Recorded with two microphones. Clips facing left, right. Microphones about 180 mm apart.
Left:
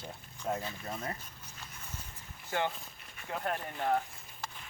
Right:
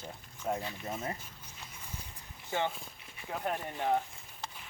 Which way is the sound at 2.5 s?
10° right (ahead or behind).